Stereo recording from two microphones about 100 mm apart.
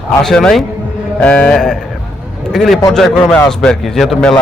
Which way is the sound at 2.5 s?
Centre (ahead or behind).